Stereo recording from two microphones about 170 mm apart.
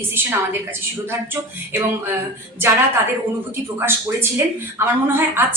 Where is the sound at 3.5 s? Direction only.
15° right (ahead or behind).